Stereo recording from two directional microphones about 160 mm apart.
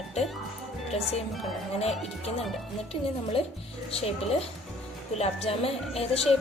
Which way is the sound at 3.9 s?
40° left (ahead or behind).